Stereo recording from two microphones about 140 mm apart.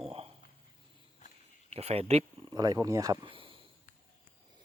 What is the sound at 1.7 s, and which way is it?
Speech, 45° right (ahead or behind).